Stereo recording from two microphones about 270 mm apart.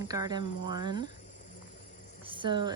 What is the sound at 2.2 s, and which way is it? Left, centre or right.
Speech, centre.